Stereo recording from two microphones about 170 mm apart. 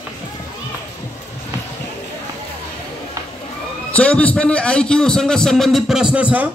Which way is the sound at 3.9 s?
10° left (ahead or behind).